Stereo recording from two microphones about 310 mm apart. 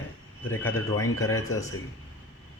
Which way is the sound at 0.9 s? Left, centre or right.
Left.